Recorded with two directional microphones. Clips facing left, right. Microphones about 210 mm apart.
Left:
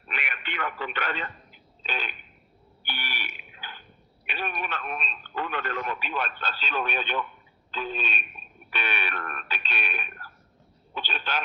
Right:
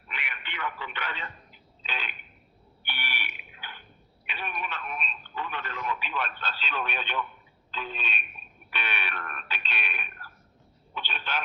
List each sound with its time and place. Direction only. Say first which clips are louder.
0.1 s radio: left 5 dB; 50° left (ahead or behind)
1.8 s a sound: left 4 dB; 45° left (ahead or behind)
2.8 s fire alarm: left 2 dB; 40° left (ahead or behind)
4.4 s speech: left 4 dB; 40° left (ahead or behind)
5.3 s speech: left 6 dB; 55° left (ahead or behind); by 11.4 s 40° left (ahead or behind)